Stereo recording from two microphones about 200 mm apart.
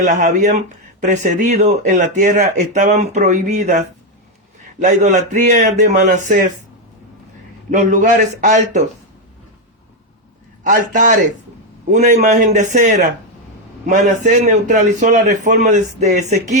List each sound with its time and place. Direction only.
0.0 s speech: 40° right (ahead or behind)
7.7 s speech: 40° right (ahead or behind)
10.6 s speech: 40° right (ahead or behind)